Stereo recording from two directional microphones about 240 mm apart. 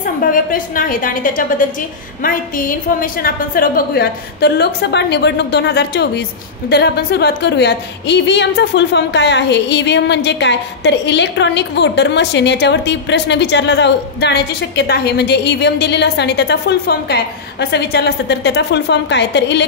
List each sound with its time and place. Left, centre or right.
0.0 s a woman's voice: left